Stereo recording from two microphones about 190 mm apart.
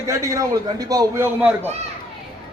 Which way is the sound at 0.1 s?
15° right (ahead or behind).